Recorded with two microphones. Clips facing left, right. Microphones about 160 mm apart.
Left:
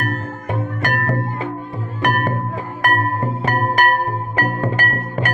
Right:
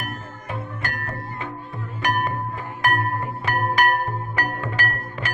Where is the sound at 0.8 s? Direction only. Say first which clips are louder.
Left 10 dB; 75° left (ahead or behind).